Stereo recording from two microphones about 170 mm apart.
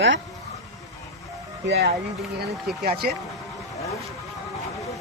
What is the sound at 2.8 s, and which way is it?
Speech, 65° right (ahead or behind).